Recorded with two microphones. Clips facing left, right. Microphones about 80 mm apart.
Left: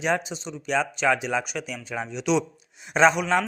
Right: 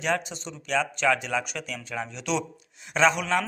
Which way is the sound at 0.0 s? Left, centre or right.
Centre.